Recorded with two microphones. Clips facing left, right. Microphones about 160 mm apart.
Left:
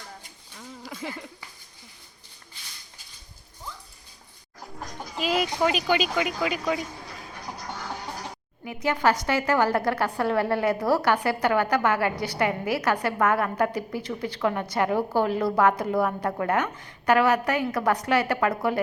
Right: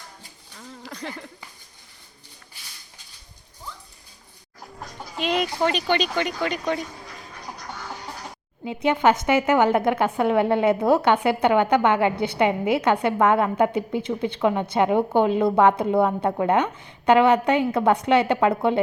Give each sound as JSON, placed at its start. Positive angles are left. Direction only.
{"t": 0.9, "sound": "speech", "side_deg": 5}
{"t": 5.1, "sound": "a sound", "side_deg": 5}
{"t": 5.6, "sound": "speech", "side_deg": 5}
{"t": 8.6, "sound": "a woman's voice", "side_deg": -25}